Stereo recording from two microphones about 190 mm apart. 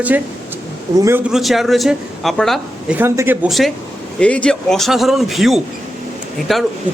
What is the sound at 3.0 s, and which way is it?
A man's voice, 10° right (ahead or behind).